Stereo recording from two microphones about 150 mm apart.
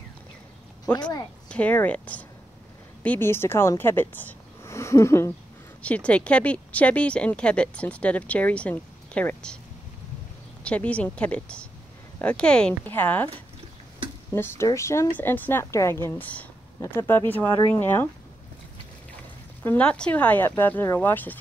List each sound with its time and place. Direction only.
1.5 s speech: 10° left (ahead or behind)
10.6 s speech: 10° left (ahead or behind)
14.3 s speech: 15° left (ahead or behind)
19.6 s speech: 10° left (ahead or behind)